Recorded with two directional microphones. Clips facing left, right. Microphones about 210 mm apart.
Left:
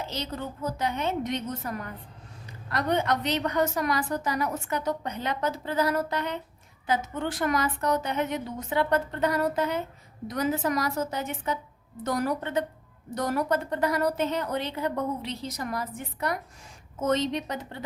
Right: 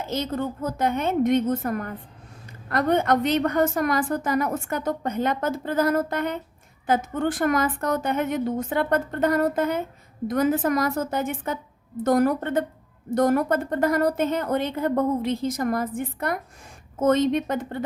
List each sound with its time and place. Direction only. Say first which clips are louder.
0.0 s a woman's voice: right 7 dB; 50° right (ahead or behind)